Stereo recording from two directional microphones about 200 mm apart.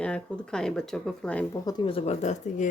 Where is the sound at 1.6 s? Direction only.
25° left (ahead or behind).